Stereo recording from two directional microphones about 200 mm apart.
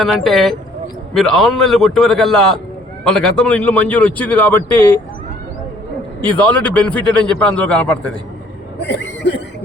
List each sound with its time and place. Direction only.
0.0 s a man's voice: centre (ahead or behind)
6.2 s a man's voice: 10° left (ahead or behind)
8.8 s speech: 60° left (ahead or behind)